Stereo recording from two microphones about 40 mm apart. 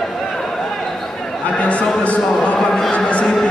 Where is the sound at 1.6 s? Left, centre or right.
Left.